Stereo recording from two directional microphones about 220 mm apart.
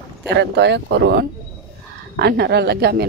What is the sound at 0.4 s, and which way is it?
Speech, 50° right (ahead or behind).